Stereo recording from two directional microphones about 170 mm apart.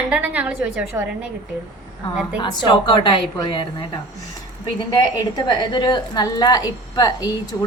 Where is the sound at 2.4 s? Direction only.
25° left (ahead or behind).